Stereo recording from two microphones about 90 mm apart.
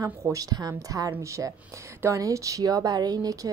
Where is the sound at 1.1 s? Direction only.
35° right (ahead or behind).